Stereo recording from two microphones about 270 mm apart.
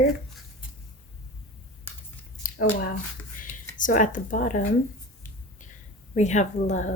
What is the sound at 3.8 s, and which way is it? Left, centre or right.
Speech, left.